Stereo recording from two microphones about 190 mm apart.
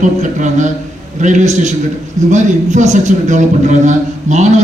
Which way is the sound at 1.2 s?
40° right (ahead or behind).